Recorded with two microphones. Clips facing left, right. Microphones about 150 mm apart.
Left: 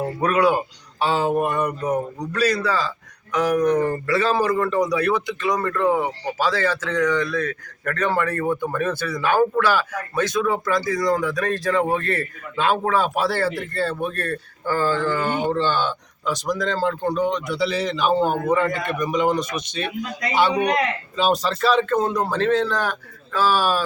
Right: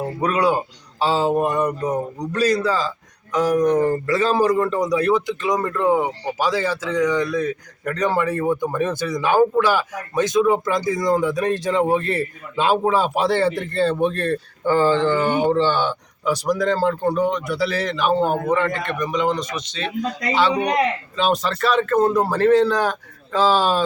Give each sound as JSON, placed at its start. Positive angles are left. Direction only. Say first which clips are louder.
{"t": 0.2, "sound": "speech", "louder": "left 1 dB", "side_deg": -20}
{"t": 1.0, "sound": "a sound", "louder": "right 2 dB", "side_deg": -35}
{"t": 1.3, "sound": "a man's voice", "louder": "right 2 dB", "side_deg": -20}
{"t": 21.2, "sound": "speech", "louder": "even", "side_deg": 0}